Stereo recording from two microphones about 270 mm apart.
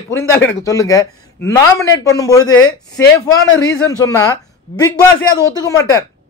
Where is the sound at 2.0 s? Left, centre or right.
Centre.